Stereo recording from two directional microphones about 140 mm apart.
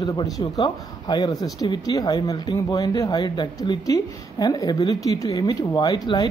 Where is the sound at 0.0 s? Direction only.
25° left (ahead or behind).